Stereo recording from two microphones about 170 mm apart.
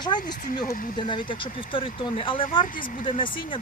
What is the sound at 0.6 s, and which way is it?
Speech, 55° left (ahead or behind).